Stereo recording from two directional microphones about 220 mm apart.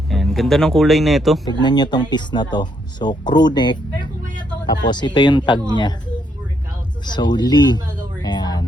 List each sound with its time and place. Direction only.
0.1 s speech: centre (ahead or behind)
1.6 s speech: 20° left (ahead or behind)
7.0 s speech: 20° left (ahead or behind)
8.2 s music: 20° left (ahead or behind)